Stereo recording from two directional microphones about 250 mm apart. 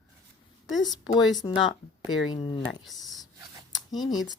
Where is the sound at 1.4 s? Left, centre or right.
Centre.